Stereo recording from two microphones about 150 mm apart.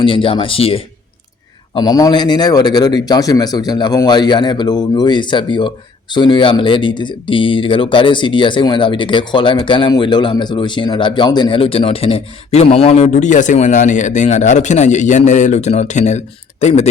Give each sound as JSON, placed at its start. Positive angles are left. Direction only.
{"t": 0.0, "sound": "speech", "side_deg": 35}
{"t": 1.7, "sound": "speech", "side_deg": 25}